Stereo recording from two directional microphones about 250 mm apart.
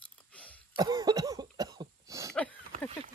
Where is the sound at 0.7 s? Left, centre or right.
Centre.